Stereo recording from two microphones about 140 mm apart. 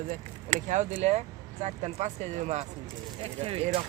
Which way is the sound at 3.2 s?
40° right (ahead or behind).